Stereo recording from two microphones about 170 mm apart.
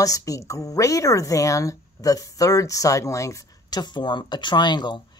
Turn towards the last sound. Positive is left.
turn(degrees=25)  # may be behind; listen again after turning